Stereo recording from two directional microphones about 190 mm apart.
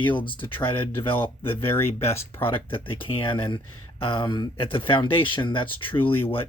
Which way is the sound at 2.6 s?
30° left (ahead or behind).